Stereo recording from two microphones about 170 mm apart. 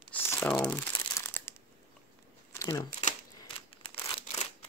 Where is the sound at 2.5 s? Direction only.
15° left (ahead or behind).